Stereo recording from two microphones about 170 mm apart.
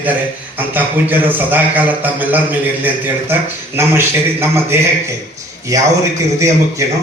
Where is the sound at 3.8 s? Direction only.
15° right (ahead or behind).